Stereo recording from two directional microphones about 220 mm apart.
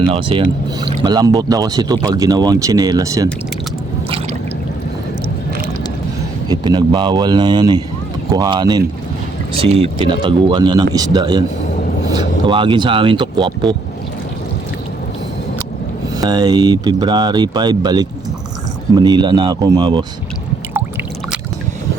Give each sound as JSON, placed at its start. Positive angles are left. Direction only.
{"t": 0.1, "sound": "speech", "side_deg": -25}
{"t": 6.5, "sound": "speech", "side_deg": -20}
{"t": 12.5, "sound": "speech", "side_deg": -20}
{"t": 16.2, "sound": "speech", "side_deg": -15}